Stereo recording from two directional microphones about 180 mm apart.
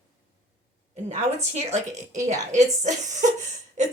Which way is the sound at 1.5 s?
40° right (ahead or behind).